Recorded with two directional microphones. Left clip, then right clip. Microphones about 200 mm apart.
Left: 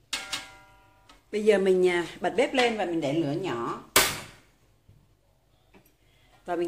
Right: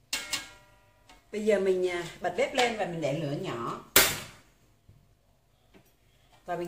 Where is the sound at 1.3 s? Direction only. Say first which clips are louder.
Left 4 dB; 50° left (ahead or behind).